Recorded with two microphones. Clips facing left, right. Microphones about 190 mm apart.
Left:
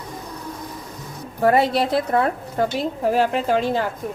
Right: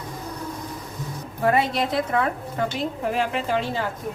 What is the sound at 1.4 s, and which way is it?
A woman's voice, 35° left (ahead or behind).